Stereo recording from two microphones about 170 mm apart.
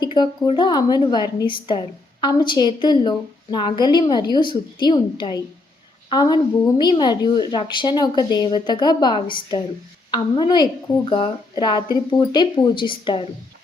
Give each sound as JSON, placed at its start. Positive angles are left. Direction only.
{"t": 0.0, "sound": "a woman's voice", "side_deg": 25}